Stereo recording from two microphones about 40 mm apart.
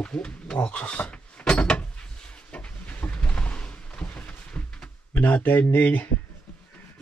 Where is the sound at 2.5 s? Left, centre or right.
Left.